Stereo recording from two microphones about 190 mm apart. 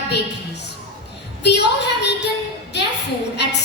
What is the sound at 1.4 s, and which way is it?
Speech, 65° left (ahead or behind).